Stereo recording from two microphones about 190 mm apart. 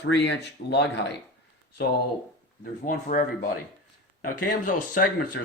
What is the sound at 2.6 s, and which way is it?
Speech, 45° left (ahead or behind).